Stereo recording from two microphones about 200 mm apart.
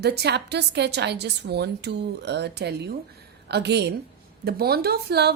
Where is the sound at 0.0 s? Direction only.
55° right (ahead or behind).